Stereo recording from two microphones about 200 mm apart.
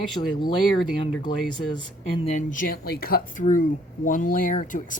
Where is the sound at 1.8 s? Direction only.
30° left (ahead or behind).